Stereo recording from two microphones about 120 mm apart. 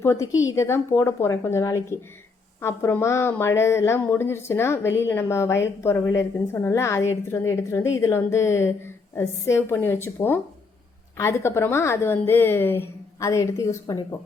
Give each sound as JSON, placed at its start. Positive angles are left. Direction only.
{"t": 0.0, "sound": "speech", "side_deg": 25}